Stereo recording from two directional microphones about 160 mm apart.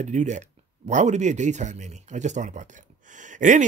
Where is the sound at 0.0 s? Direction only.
50° right (ahead or behind).